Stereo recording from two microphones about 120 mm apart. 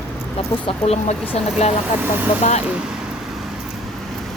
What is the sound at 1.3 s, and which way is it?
Speech, 60° left (ahead or behind).